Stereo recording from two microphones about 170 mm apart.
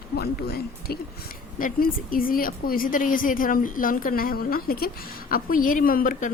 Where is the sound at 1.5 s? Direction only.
55° left (ahead or behind).